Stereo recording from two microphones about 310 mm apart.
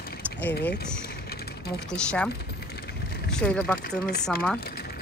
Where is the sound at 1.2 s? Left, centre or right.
Left.